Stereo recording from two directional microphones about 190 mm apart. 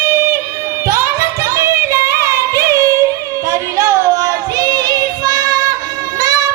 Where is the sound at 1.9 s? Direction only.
15° right (ahead or behind).